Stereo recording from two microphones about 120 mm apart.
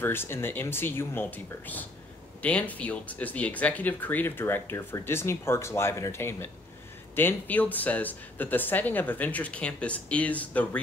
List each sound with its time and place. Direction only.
0.0 s speech: 20° left (ahead or behind)